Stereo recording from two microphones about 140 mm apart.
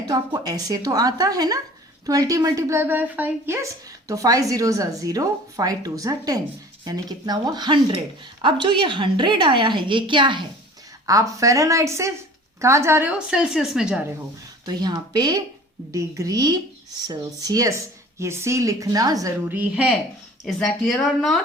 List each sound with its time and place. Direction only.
0.1 s a woman's voice: 25° right (ahead or behind)
11.0 s a woman's voice: 25° right (ahead or behind); by 14.0 s 5° right (ahead or behind)
14.6 s a woman's voice: 30° right (ahead or behind)
19.5 s a woman's voice: 10° right (ahead or behind)
21.0 s speech: centre (ahead or behind)